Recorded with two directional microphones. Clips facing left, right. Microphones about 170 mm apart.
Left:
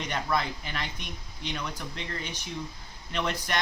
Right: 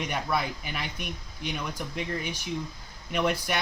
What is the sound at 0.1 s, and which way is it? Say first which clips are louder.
Speech: left 3 dB; 10° right (ahead or behind).